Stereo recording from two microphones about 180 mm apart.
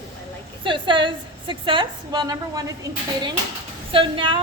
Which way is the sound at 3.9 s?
30° right (ahead or behind).